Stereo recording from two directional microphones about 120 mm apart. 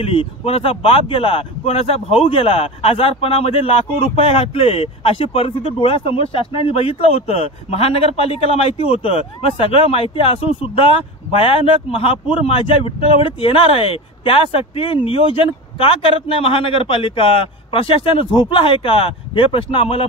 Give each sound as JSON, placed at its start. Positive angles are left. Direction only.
{"t": 0.0, "sound": "speech", "side_deg": 50}